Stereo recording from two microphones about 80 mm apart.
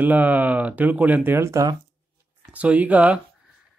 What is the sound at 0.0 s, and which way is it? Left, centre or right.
Speech, right.